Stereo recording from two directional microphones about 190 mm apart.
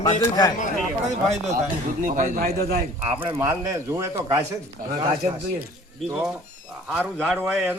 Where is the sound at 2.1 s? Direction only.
50° right (ahead or behind).